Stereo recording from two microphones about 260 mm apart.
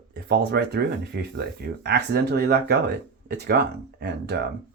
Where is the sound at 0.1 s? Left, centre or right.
Right.